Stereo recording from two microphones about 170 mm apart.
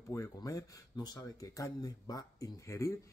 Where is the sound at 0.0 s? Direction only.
20° left (ahead or behind).